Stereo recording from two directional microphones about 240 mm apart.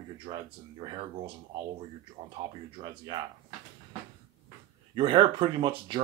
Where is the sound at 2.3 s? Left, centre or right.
Centre.